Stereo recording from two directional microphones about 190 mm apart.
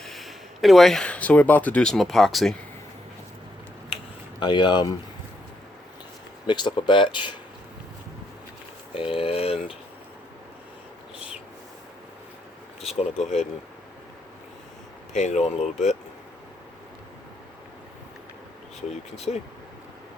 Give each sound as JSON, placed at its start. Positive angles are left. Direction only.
{"t": 0.0, "sound": "speech", "side_deg": 0}
{"t": 4.4, "sound": "speech", "side_deg": 25}
{"t": 6.5, "sound": "speech", "side_deg": 25}
{"t": 9.0, "sound": "a sound", "side_deg": 30}
{"t": 13.1, "sound": "speech", "side_deg": 35}
{"t": 15.1, "sound": "speech", "side_deg": 40}
{"t": 19.1, "sound": "speech", "side_deg": 35}